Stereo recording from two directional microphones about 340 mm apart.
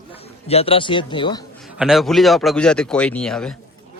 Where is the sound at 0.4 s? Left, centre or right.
Centre.